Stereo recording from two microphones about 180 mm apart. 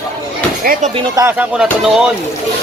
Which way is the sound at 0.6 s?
50° right (ahead or behind).